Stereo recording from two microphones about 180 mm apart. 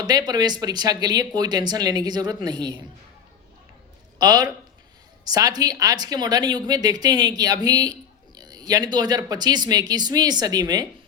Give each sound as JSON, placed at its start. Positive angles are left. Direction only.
{"t": 0.0, "sound": "a woman's voice", "side_deg": -20}
{"t": 4.2, "sound": "a woman's voice", "side_deg": -20}